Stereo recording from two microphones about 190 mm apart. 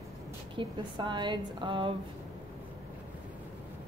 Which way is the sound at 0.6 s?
25° right (ahead or behind).